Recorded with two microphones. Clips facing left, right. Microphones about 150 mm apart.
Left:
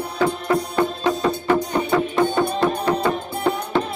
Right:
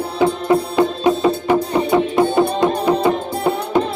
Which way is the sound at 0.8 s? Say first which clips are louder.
Right 5 dB; 15° right (ahead or behind).